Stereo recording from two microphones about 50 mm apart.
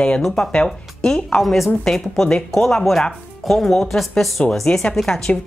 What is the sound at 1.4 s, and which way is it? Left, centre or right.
Speech, centre.